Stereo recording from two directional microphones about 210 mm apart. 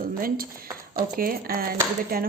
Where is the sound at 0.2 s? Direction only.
45° right (ahead or behind).